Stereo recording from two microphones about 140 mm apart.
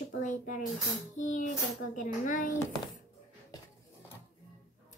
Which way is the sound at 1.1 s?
65° left (ahead or behind).